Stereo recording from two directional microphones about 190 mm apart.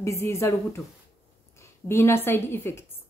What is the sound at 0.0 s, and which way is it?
A woman's voice, 15° left (ahead or behind).